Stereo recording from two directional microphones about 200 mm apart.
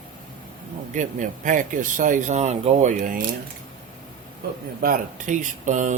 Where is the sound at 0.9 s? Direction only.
40° right (ahead or behind).